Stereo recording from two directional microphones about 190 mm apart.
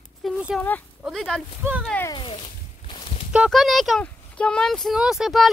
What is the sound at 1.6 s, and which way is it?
Speech, 5° right (ahead or behind).